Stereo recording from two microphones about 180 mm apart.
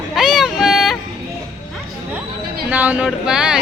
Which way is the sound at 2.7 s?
10° right (ahead or behind).